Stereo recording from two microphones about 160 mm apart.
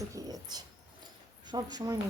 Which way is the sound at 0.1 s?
20° right (ahead or behind).